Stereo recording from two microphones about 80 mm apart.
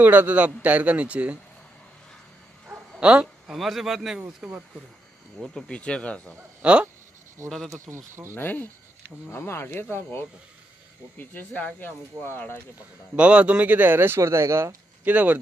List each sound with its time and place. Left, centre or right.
0.0 s a man's voice: right
3.0 s a man's voice: centre
3.5 s a man's voice: centre
5.4 s speech: centre
6.6 s speech: centre
7.4 s a man's voice: centre
7.9 s speech: right
8.4 s speech: left
13.1 s a man's voice: centre; by 14.7 s right
15.0 s a man's voice: centre